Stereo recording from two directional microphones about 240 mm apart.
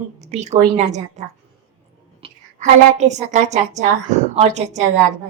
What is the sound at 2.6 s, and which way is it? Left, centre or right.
A woman's voice, right.